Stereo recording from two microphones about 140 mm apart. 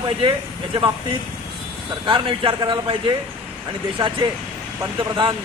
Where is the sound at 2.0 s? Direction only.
35° right (ahead or behind).